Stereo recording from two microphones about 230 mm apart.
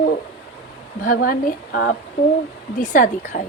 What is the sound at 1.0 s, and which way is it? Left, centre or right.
Speech, left.